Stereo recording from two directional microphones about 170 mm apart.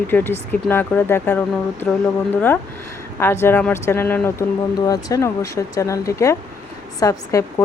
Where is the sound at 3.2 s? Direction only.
15° left (ahead or behind).